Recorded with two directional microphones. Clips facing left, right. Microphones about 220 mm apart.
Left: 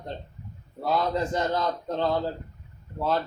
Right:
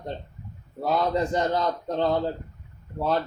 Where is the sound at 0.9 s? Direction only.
15° right (ahead or behind).